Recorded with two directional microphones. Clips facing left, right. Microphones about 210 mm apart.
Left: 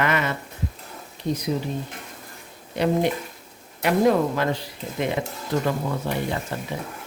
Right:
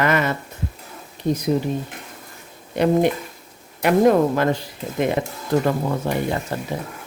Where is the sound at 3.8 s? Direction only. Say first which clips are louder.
Right 4 dB; 50° right (ahead or behind).